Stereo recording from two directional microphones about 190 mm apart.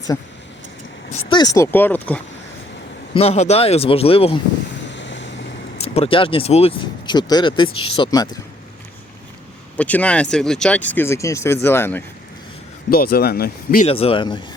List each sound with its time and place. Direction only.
1.3 s speech: 20° left (ahead or behind)
3.2 s speech: 35° left (ahead or behind)
4.9 s boat: 70° left (ahead or behind)
5.8 s speech: 30° left (ahead or behind)
9.7 s speech: 5° left (ahead or behind)
12.9 s speech: 50° left (ahead or behind)
13.8 s speech: 30° left (ahead or behind)